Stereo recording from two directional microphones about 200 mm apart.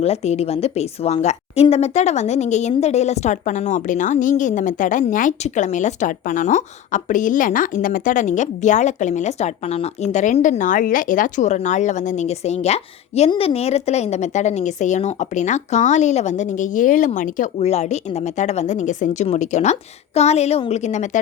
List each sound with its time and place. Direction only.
0.0 s a woman's voice: 30° left (ahead or behind)